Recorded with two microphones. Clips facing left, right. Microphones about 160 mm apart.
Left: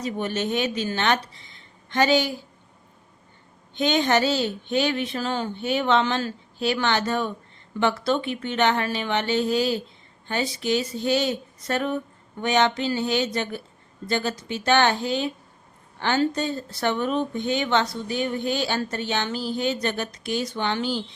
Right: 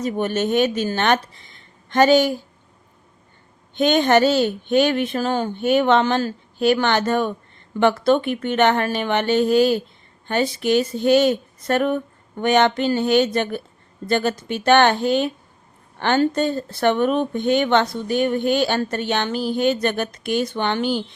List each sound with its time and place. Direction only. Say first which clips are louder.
0.0 s speech: right 5 dB; 50° right (ahead or behind)
3.8 s speech: right 5 dB; 55° right (ahead or behind)